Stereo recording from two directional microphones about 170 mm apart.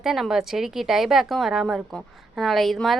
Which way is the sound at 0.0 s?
Centre (ahead or behind).